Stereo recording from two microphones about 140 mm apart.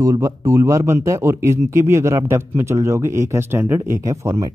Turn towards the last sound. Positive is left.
turn(degrees=-20)  # may be behind; listen again after turning